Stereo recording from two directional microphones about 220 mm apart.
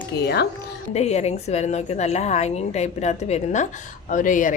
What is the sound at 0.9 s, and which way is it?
A woman's voice, 30° left (ahead or behind).